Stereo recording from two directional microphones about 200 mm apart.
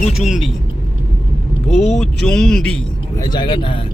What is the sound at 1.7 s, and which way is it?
Speech, 35° left (ahead or behind).